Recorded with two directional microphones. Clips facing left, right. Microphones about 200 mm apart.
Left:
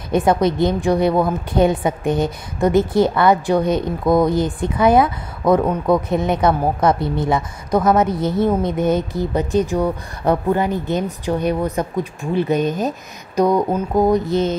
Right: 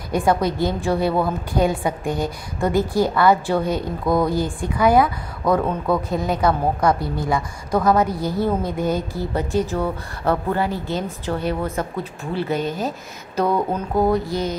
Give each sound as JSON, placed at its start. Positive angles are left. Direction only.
{"t": 0.1, "sound": "a woman's voice", "side_deg": 20}
{"t": 13.4, "sound": "mantra", "side_deg": 15}